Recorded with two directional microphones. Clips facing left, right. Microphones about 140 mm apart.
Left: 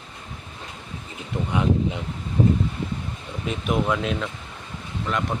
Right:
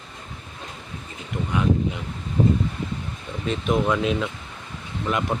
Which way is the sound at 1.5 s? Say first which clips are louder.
Even; 20° left (ahead or behind).